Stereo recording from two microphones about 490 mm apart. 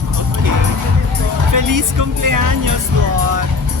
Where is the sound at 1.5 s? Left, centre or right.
Right.